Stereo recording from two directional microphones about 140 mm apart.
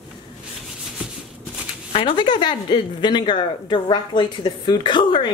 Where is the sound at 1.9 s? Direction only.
35° left (ahead or behind).